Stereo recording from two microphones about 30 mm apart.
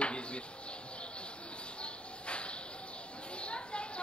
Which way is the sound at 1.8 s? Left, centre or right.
Left.